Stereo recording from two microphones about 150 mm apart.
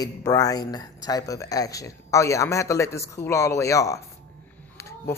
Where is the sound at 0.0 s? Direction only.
25° left (ahead or behind).